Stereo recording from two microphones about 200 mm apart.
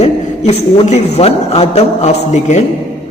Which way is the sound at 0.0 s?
35° left (ahead or behind).